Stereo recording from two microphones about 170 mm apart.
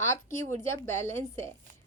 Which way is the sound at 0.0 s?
15° left (ahead or behind).